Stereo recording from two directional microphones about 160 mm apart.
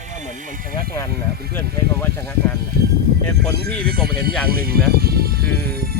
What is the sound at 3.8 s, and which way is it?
Speech, 75° right (ahead or behind).